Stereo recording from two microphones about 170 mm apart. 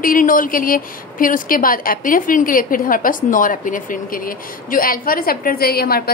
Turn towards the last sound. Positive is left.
turn(degrees=65)  # may be behind; listen again after turning